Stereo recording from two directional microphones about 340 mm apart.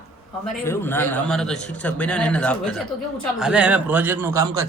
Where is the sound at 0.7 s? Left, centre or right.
Centre.